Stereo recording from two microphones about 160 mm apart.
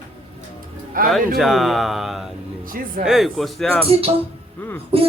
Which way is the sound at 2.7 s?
60° right (ahead or behind).